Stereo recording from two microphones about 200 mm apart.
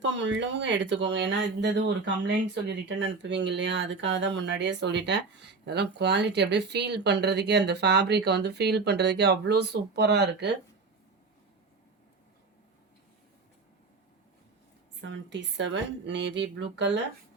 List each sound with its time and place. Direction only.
0.0 s speech: 65° right (ahead or behind)
15.3 s speech: 65° right (ahead or behind)